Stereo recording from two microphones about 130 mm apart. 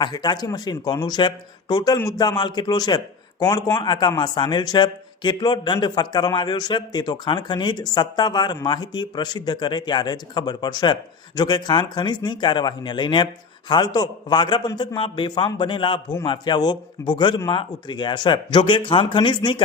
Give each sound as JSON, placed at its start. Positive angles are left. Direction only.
{"t": 0.0, "sound": "a man's voice", "side_deg": 35}